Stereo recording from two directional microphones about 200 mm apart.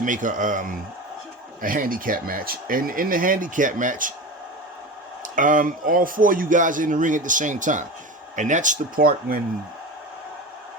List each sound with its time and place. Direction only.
0.0 s a man's voice: 40° right (ahead or behind)
5.2 s a man's voice: 40° right (ahead or behind)